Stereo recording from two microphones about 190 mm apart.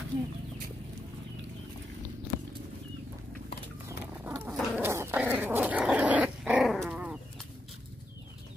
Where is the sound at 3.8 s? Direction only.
10° right (ahead or behind).